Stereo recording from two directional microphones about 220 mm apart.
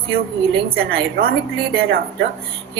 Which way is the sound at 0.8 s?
45° right (ahead or behind).